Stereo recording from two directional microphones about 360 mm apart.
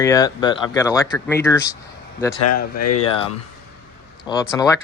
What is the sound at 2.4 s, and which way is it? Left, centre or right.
Speech, left.